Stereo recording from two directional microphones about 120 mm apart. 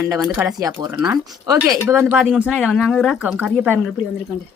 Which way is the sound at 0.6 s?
30° right (ahead or behind).